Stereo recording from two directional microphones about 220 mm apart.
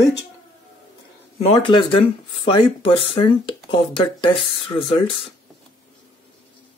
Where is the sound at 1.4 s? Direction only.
25° left (ahead or behind).